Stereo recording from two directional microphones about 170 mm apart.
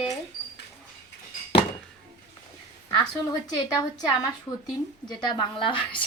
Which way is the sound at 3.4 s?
20° left (ahead or behind).